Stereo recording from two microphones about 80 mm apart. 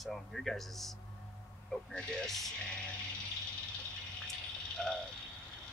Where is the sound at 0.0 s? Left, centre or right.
Centre.